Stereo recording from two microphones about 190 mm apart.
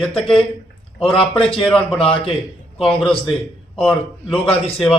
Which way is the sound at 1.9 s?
30° left (ahead or behind).